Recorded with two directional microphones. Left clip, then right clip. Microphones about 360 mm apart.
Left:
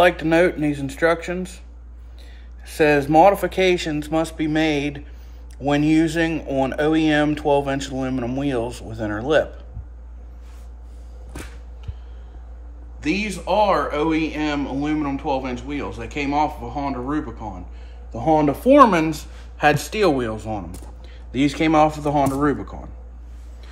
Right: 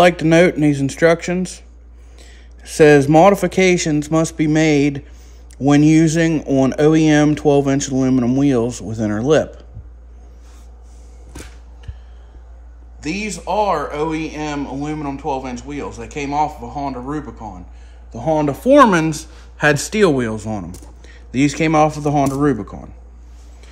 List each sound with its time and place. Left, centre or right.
0.0 s speech: right
2.6 s speech: right
13.0 s speech: centre
18.1 s speech: right